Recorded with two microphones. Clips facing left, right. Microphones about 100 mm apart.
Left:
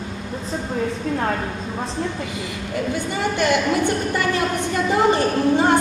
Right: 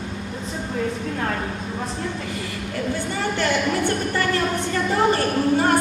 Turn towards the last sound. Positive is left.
turn(degrees=20)  # may be behind; listen again after turning